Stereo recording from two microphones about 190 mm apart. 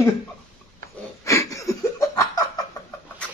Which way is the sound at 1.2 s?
15° left (ahead or behind).